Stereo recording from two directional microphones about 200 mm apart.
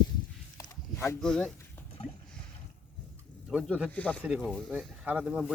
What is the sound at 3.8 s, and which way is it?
Speech, 5° left (ahead or behind).